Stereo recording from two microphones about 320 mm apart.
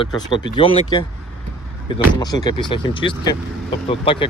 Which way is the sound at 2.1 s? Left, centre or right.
Centre.